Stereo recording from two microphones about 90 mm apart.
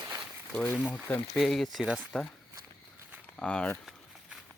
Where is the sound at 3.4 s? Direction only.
15° left (ahead or behind).